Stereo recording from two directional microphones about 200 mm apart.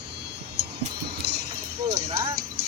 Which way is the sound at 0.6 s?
55° right (ahead or behind).